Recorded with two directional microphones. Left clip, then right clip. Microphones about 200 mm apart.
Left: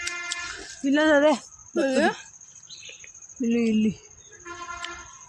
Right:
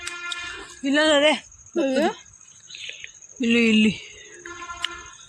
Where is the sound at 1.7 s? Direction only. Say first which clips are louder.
Even; 25° right (ahead or behind).